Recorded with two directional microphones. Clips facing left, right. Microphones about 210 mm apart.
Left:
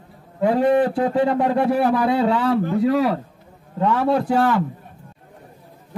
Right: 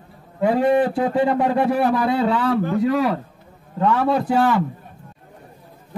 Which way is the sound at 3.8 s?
5° left (ahead or behind).